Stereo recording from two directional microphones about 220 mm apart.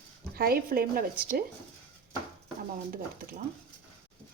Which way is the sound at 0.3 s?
40° right (ahead or behind).